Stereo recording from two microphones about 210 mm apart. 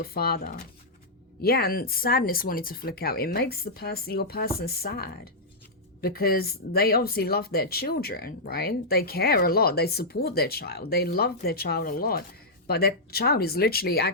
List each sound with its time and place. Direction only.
0.0 s speech: 45° left (ahead or behind)